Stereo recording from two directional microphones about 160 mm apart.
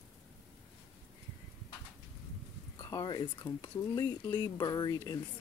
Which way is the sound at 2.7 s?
30° left (ahead or behind).